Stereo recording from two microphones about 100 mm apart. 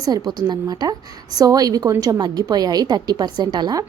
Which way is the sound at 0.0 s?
40° right (ahead or behind).